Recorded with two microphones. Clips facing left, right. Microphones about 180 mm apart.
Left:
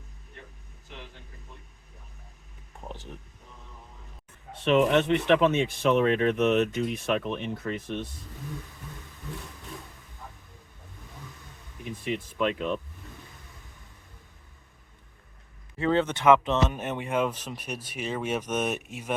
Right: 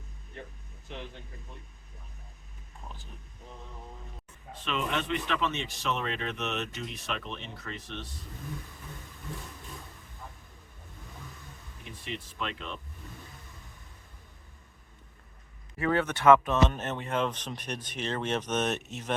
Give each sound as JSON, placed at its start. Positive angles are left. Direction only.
{"t": 2.9, "sound": "speech", "side_deg": 70}
{"t": 4.6, "sound": "speech", "side_deg": 65}
{"t": 12.0, "sound": "speech", "side_deg": 50}
{"t": 15.8, "sound": "speech", "side_deg": 25}